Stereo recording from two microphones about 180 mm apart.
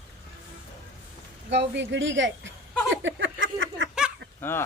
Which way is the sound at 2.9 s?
90° right.